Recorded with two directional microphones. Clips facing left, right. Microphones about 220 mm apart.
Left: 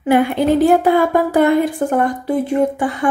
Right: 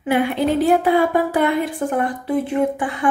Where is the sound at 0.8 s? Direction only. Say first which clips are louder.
Left 3 dB; 45° left (ahead or behind).